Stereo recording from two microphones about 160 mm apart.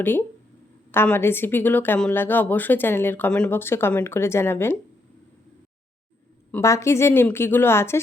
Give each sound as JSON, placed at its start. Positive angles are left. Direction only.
{"t": 0.0, "sound": "speech", "side_deg": 15}
{"t": 6.5, "sound": "speech", "side_deg": 20}